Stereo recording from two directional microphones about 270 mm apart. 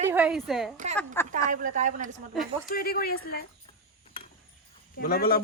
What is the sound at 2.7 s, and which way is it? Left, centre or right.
Speech, left.